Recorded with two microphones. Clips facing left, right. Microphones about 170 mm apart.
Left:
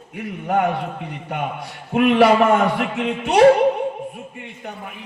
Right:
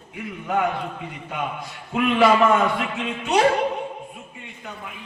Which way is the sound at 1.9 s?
60° left (ahead or behind).